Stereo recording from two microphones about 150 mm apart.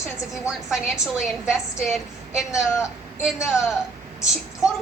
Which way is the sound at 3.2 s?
Centre (ahead or behind).